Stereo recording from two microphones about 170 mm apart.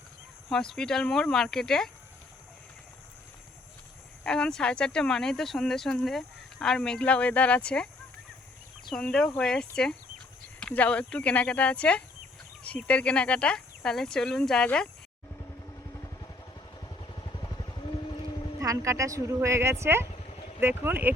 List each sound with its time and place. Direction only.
0.5 s speech: 5° left (ahead or behind)
4.2 s speech: 5° left (ahead or behind)
9.4 s speech: 5° left (ahead or behind)
16.8 s vehicle: 25° left (ahead or behind)
18.6 s a woman's voice: 20° right (ahead or behind)